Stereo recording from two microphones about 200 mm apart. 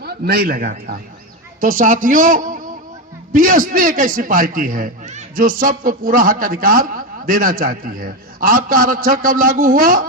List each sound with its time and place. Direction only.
0.0 s a man's voice: 50° right (ahead or behind)